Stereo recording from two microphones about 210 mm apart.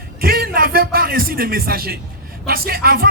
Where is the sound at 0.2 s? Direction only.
45° right (ahead or behind).